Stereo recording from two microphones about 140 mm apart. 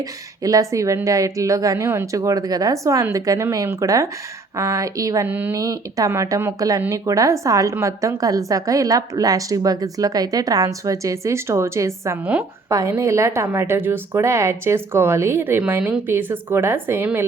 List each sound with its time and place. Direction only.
0.4 s speech: 25° right (ahead or behind)
5.3 s speech: 15° right (ahead or behind)
5.5 s speech: 25° right (ahead or behind)